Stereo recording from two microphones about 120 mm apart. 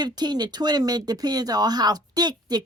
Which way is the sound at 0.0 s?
35° right (ahead or behind).